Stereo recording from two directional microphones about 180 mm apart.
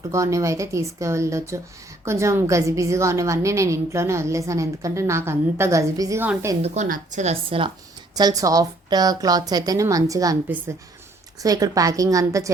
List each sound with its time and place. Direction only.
0.1 s a woman's voice: 15° right (ahead or behind)
6.6 s a woman's voice: 45° right (ahead or behind)
8.1 s a woman's voice: 20° right (ahead or behind)
11.4 s a woman's voice: 20° right (ahead or behind)